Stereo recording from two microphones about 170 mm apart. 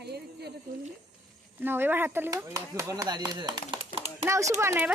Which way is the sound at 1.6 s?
10° right (ahead or behind).